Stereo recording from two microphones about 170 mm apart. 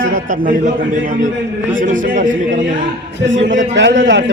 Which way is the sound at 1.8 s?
50° right (ahead or behind).